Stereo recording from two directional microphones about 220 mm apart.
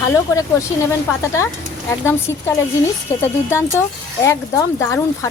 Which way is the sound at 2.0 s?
10° left (ahead or behind).